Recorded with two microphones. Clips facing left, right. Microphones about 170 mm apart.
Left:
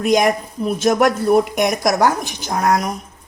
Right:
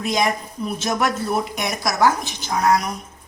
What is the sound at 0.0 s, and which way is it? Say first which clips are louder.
Speech: left 6 dB; 55° left (ahead or behind).